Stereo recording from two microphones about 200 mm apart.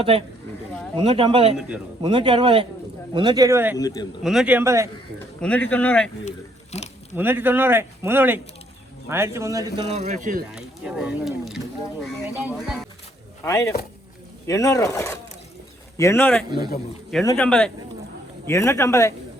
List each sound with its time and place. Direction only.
0.0 s speech: 30° right (ahead or behind); by 3.8 s 10° right (ahead or behind)
3.8 s speech: 20° left (ahead or behind)
4.2 s speech: centre (ahead or behind)
5.4 s speech: 5° left (ahead or behind)
6.2 s a sound: 35° left (ahead or behind)
7.2 s speech: 10° right (ahead or behind)
9.9 s speech: 35° right (ahead or behind)
10.5 s speech: 5° right (ahead or behind)
13.4 s speech: 15° left (ahead or behind)
16.6 s speech: 50° left (ahead or behind)
17.3 s speech: 5° left (ahead or behind)